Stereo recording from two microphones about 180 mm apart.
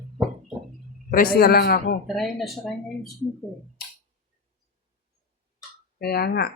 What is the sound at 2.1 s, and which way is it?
Speech, centre (ahead or behind).